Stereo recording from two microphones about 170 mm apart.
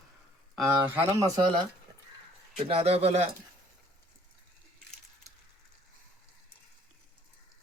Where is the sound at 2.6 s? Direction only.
35° right (ahead or behind).